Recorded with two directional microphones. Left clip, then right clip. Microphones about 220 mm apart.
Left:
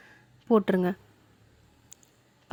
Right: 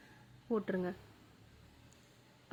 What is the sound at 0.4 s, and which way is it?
Speech, 45° left (ahead or behind).